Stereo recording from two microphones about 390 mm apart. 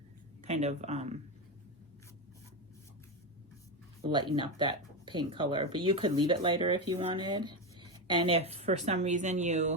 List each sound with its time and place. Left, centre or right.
0.4 s speech: centre
4.0 s speech: centre